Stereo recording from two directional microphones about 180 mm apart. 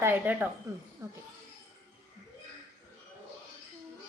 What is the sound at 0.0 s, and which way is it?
A woman's voice, 10° right (ahead or behind).